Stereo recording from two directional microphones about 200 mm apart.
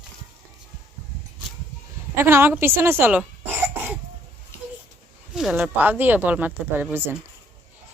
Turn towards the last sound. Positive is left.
turn(degrees=-10)  # may be behind; listen again after turning